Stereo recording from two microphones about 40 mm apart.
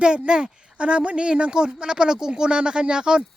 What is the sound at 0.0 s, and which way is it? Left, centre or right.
Speech, right.